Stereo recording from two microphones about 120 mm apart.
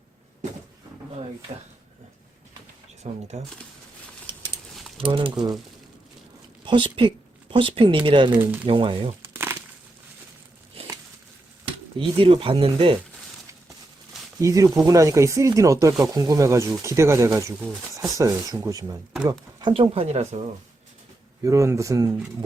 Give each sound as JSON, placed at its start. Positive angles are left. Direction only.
{"t": 3.1, "sound": "speech", "side_deg": -90}
{"t": 4.9, "sound": "speech", "side_deg": -45}
{"t": 6.7, "sound": "speech", "side_deg": -40}
{"t": 9.2, "sound": "a sound", "side_deg": -20}
{"t": 11.9, "sound": "speech", "side_deg": -45}
{"t": 14.3, "sound": "speech", "side_deg": -25}
{"t": 19.7, "sound": "speech", "side_deg": -50}
{"t": 21.4, "sound": "speech", "side_deg": -25}